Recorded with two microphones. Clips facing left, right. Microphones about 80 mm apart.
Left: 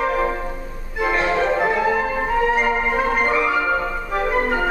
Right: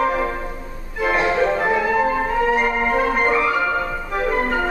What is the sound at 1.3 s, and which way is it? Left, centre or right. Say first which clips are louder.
Music: even; centre.